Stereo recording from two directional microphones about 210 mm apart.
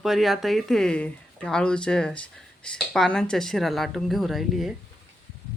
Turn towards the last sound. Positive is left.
turn(degrees=0)  # may be behind; listen again after turning